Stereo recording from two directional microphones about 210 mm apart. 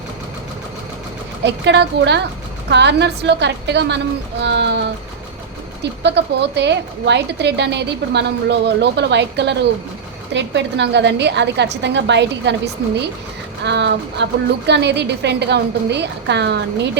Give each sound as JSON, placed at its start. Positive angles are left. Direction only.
{"t": 1.5, "sound": "a woman's voice", "side_deg": -55}
{"t": 5.8, "sound": "a woman's voice", "side_deg": -55}